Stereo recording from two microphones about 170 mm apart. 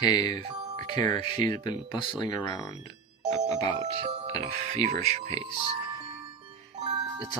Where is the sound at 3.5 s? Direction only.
20° left (ahead or behind).